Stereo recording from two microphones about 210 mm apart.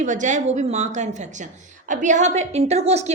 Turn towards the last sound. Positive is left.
turn(degrees=-30)  # may be behind; listen again after turning